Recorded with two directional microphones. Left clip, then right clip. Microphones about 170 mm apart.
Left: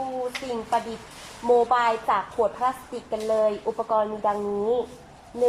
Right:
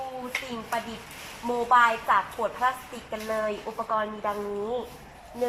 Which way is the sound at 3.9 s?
20° left (ahead or behind).